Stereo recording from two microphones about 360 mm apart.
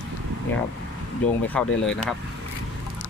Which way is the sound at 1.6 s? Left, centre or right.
Centre.